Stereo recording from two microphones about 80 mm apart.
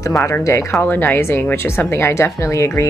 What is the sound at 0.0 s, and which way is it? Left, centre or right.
A woman's voice, left.